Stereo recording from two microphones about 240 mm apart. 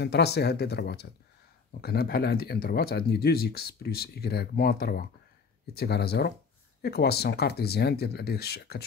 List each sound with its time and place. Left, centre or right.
0.0 s speech: left